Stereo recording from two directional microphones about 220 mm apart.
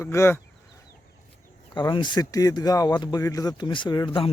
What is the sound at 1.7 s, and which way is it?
Speech, 20° left (ahead or behind).